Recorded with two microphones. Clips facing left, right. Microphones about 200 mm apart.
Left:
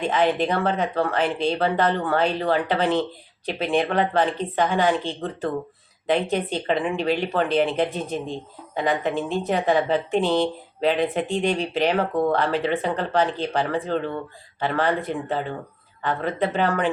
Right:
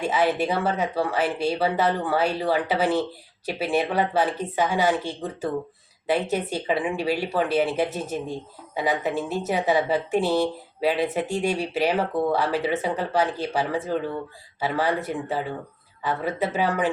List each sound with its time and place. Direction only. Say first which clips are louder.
0.0 s speech: left 1 dB; 10° right (ahead or behind)